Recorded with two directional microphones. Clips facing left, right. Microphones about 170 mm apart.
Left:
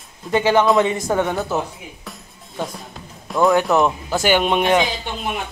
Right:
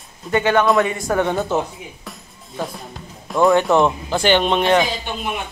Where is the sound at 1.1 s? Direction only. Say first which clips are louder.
Right 1 dB; 10° left (ahead or behind).